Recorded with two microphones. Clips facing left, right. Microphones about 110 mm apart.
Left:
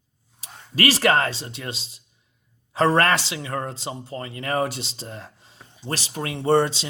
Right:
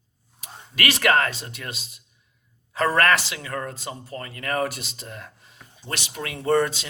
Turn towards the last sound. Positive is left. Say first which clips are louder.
# left 2 dB
turn(degrees=30)  # may be behind; listen again after turning